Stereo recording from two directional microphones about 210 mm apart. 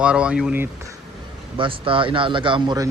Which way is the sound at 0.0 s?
5° right (ahead or behind).